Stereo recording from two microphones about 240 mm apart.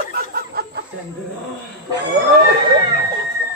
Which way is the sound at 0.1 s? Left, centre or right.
Right.